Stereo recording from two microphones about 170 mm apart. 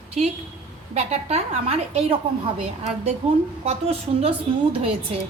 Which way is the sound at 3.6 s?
40° right (ahead or behind).